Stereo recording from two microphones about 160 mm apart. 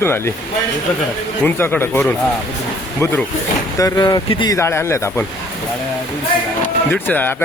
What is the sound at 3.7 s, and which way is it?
Speech, 20° left (ahead or behind).